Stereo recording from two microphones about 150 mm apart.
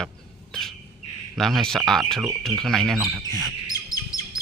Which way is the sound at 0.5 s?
5° left (ahead or behind).